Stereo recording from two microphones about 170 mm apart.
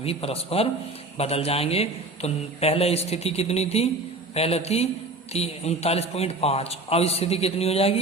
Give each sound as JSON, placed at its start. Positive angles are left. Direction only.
{"t": 0.0, "sound": "a man's voice", "side_deg": 35}